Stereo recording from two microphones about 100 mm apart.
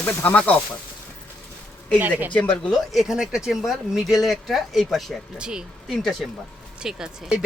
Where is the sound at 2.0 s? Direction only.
20° right (ahead or behind).